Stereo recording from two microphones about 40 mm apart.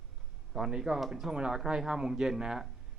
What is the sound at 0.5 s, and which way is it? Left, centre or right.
Speech, centre.